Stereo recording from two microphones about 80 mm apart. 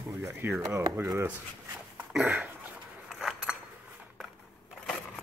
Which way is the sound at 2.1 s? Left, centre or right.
Centre.